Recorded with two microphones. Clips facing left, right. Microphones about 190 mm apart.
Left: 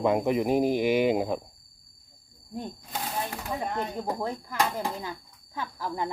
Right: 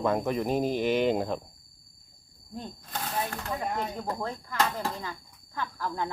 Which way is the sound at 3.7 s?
15° left (ahead or behind).